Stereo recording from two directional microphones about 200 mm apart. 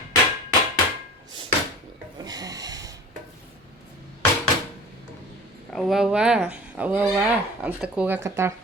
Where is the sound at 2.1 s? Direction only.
20° right (ahead or behind).